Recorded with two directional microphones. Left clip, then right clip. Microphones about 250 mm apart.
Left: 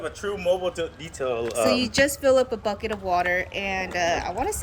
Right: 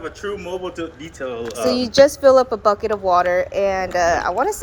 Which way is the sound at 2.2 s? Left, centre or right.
Centre.